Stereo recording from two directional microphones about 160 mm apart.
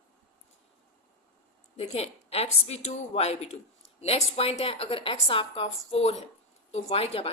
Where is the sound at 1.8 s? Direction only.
40° left (ahead or behind).